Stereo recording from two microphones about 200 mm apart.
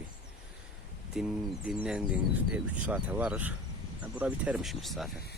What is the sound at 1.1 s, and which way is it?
Speech, 5° right (ahead or behind).